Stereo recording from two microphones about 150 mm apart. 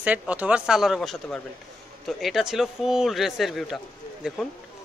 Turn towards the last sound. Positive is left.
turn(degrees=-5)  # may be behind; listen again after turning